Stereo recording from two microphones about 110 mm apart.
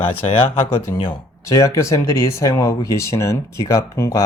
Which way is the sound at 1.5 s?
30° left (ahead or behind).